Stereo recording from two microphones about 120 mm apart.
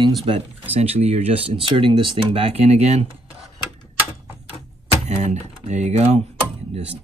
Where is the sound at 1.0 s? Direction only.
55° right (ahead or behind).